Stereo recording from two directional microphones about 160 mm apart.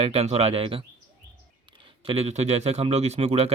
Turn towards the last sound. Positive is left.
turn(degrees=-40)  # may be behind; listen again after turning